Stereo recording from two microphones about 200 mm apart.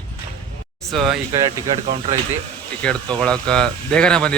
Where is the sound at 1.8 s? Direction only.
35° right (ahead or behind).